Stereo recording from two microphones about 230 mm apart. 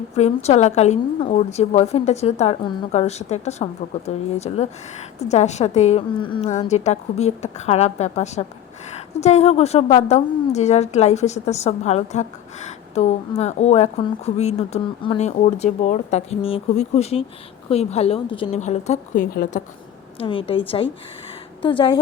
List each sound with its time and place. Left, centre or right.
0.2 s a woman's voice: left
20.1 s a woman's voice: left